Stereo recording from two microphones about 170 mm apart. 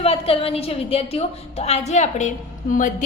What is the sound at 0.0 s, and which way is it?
A woman's voice, 35° left (ahead or behind).